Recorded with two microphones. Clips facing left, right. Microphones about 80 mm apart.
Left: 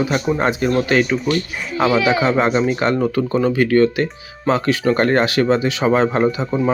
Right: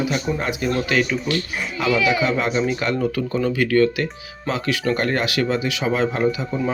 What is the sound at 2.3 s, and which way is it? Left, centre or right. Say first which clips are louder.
Speech: left 4 dB; left.